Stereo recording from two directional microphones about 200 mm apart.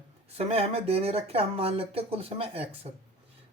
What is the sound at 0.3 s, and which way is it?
Speech, 30° right (ahead or behind).